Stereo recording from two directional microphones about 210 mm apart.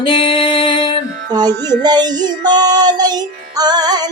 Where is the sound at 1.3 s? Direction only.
20° right (ahead or behind).